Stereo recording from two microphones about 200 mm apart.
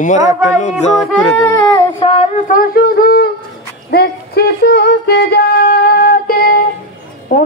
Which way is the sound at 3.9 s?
50° left (ahead or behind).